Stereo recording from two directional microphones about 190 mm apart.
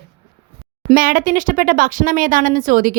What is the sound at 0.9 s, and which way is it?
Speech, 45° right (ahead or behind).